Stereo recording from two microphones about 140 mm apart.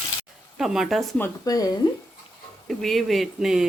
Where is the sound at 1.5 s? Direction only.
25° left (ahead or behind).